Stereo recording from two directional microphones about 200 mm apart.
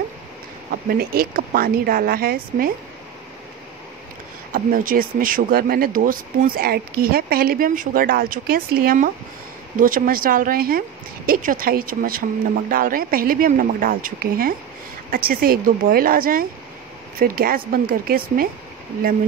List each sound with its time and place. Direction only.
0.8 s speech: 50° right (ahead or behind)
4.5 s speech: 45° right (ahead or behind)